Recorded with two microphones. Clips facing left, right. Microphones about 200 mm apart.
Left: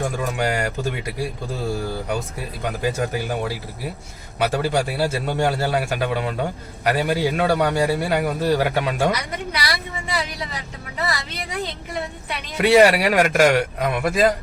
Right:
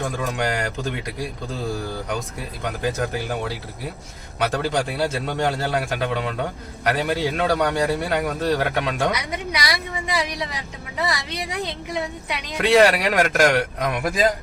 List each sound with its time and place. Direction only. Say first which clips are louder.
0.3 s a man's voice: left 2 dB; 10° left (ahead or behind)
2.6 s a man's voice: left 1 dB; 10° left (ahead or behind)
9.1 s a sound: even; 15° right (ahead or behind)
10.9 s a woman's voice: right 1 dB; 15° right (ahead or behind)
12.5 s a man's voice: left 2 dB; 10° left (ahead or behind)